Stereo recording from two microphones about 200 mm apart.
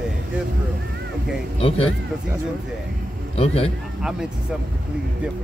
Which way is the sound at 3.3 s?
30° left (ahead or behind).